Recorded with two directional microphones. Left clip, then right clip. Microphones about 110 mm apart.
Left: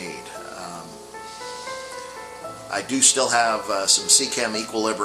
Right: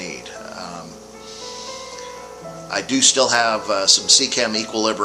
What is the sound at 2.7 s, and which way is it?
Speech, 55° right (ahead or behind).